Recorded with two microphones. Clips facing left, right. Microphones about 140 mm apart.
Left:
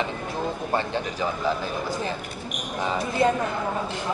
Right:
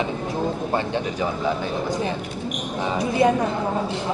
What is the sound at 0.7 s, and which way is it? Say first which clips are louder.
Speech: right 1 dB; 15° right (ahead or behind).